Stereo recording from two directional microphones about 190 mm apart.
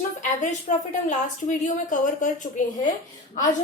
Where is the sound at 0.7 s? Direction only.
35° left (ahead or behind).